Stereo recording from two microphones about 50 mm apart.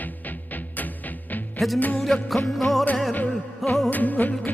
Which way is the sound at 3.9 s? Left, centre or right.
Left.